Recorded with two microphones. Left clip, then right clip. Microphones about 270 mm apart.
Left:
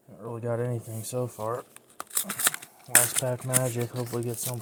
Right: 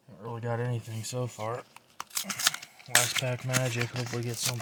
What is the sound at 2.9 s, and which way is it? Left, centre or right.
Speech, right.